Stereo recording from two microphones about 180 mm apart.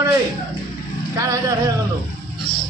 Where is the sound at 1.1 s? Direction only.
20° right (ahead or behind).